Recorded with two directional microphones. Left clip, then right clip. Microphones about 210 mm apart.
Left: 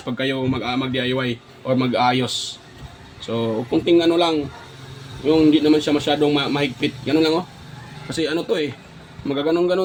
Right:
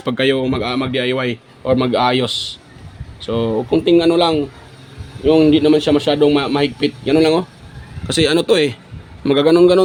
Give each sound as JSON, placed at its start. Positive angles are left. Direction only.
{"t": 0.0, "sound": "a man's voice", "side_deg": -55}